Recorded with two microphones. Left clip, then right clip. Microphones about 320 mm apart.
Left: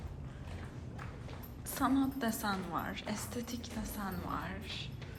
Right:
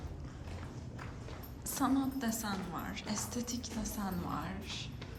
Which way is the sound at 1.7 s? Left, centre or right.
Centre.